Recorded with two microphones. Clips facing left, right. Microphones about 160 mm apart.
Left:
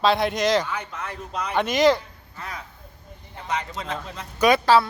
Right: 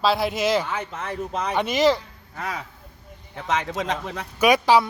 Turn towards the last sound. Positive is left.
turn(degrees=-15)  # may be behind; listen again after turning